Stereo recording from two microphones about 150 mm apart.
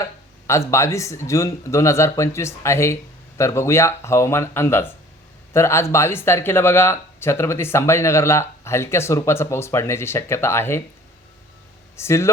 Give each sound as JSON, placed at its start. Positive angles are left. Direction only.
{"t": 0.0, "sound": "speech", "side_deg": 20}
{"t": 11.9, "sound": "speech", "side_deg": 20}